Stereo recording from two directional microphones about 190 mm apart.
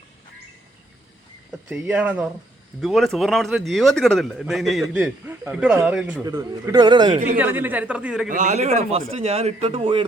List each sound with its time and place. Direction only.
1.7 s a woman's voice: 5° right (ahead or behind)
6.2 s a man's voice: 20° right (ahead or behind)
7.3 s a woman's voice: 10° right (ahead or behind)
8.3 s a man's voice: 40° right (ahead or behind)